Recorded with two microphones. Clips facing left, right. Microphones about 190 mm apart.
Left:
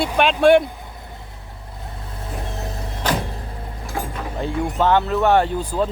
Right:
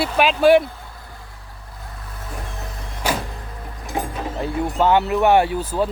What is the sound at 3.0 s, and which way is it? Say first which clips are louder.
Music: left 1 dB; 10° right (ahead or behind).